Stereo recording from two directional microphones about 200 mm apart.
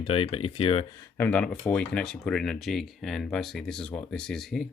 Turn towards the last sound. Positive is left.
turn(degrees=0)  # may be behind; listen again after turning